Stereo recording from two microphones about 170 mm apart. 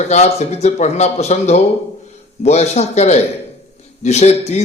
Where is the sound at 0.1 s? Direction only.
40° left (ahead or behind).